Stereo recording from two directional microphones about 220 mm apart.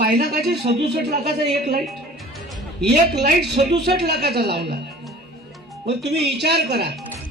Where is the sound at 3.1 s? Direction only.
45° right (ahead or behind).